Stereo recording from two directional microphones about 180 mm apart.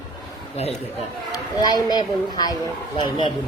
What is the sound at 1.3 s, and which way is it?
Speech, 20° left (ahead or behind).